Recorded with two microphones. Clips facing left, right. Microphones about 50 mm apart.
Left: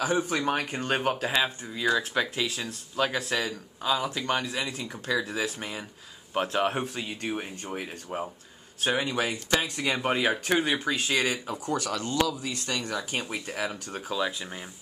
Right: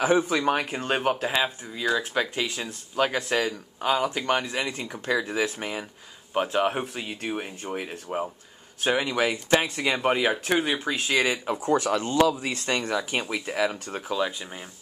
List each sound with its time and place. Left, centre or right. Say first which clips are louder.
0.0 s speech: right 4 dB; right
0.7 s speech: right 2 dB; centre
2.3 s speech: right 1 dB; right
6.3 s speech: right 2 dB; centre
8.8 s speech: right 3 dB; right
9.9 s speech: right 3 dB; centre
11.5 s speech: right 6 dB; right
14.0 s speech: right 2 dB; centre